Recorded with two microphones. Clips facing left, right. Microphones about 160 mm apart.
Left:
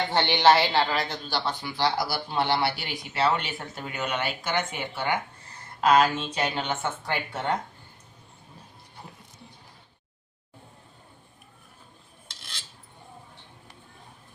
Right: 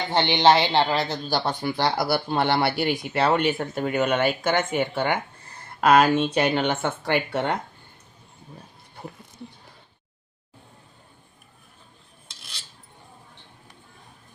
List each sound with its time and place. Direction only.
0.1 s a man's voice: 20° right (ahead or behind)
1.3 s speech: 50° right (ahead or behind); by 7.5 s 70° right (ahead or behind)